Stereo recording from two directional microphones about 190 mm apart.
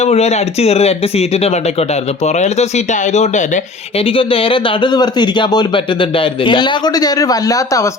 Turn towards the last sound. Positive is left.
turn(degrees=15)  # may be behind; listen again after turning